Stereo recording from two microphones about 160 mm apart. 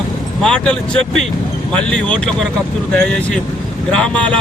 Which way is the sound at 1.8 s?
5° left (ahead or behind).